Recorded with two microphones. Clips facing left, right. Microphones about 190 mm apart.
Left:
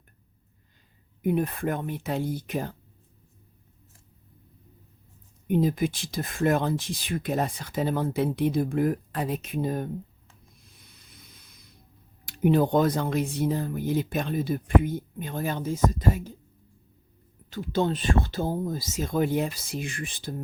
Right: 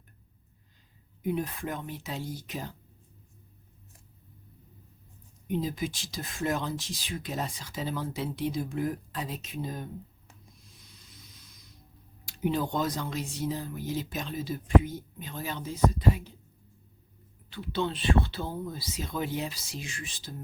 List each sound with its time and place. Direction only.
1.2 s speech: 55° left (ahead or behind)
5.5 s speech: 55° left (ahead or behind)
10.7 s vehicle: 55° left (ahead or behind)
12.2 s speech: 55° left (ahead or behind)
17.5 s speech: 45° left (ahead or behind)